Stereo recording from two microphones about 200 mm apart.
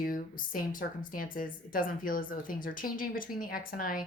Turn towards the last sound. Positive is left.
turn(degrees=45)  # may be behind; listen again after turning